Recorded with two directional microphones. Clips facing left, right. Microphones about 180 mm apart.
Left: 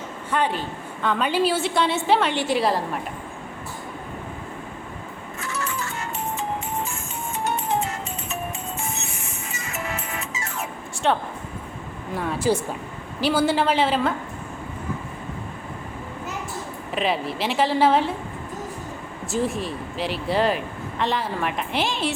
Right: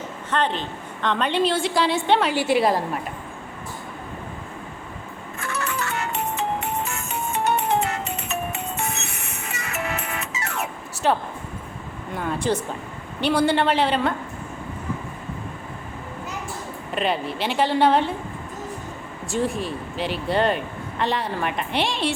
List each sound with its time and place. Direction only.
0.3 s speech: 10° left (ahead or behind); by 2.7 s 10° right (ahead or behind)
5.4 s music: 60° right (ahead or behind)
11.0 s speech: centre (ahead or behind)
16.9 s speech: centre (ahead or behind)
19.3 s speech: centre (ahead or behind)